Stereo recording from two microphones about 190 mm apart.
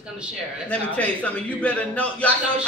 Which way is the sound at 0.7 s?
5° left (ahead or behind).